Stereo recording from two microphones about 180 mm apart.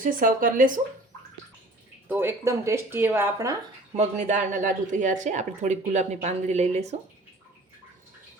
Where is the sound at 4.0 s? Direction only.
40° right (ahead or behind).